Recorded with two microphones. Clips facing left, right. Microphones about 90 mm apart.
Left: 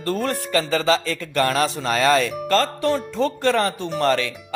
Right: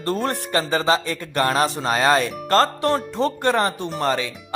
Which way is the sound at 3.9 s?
5° right (ahead or behind).